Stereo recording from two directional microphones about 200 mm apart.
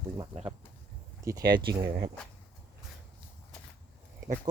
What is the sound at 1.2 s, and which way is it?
Speech, 20° right (ahead or behind).